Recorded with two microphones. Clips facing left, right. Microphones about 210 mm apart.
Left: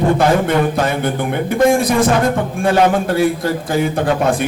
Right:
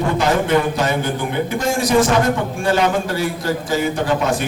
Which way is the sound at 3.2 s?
55° left (ahead or behind).